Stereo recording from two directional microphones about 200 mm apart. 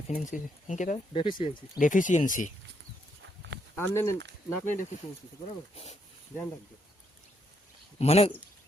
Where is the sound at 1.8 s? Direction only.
40° left (ahead or behind).